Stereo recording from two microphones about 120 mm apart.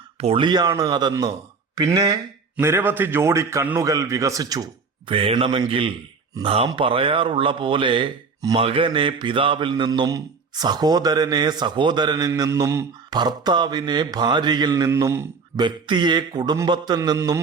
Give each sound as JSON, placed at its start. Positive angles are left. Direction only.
{"t": 0.2, "sound": "speech", "side_deg": -60}
{"t": 0.4, "sound": "a man's voice", "side_deg": -35}
{"t": 2.6, "sound": "speech", "side_deg": -20}
{"t": 5.1, "sound": "a man's voice", "side_deg": -50}
{"t": 8.5, "sound": "a man's voice", "side_deg": -50}
{"t": 14.8, "sound": "speech", "side_deg": -25}
{"t": 15.6, "sound": "a man's voice", "side_deg": -40}
{"t": 17.2, "sound": "speech", "side_deg": -25}